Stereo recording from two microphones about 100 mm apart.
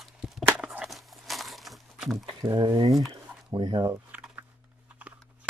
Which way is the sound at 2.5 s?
50° right (ahead or behind).